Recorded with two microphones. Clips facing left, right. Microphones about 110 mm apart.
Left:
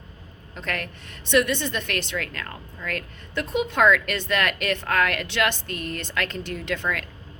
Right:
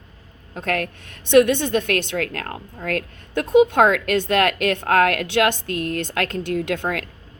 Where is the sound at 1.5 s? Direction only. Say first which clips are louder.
Right 7 dB; 55° right (ahead or behind).